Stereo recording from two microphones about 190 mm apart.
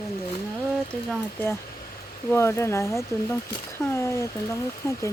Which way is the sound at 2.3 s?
15° left (ahead or behind).